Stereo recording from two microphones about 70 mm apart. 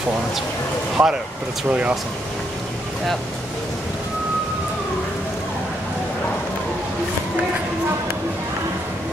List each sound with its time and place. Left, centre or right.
1.0 s speech: right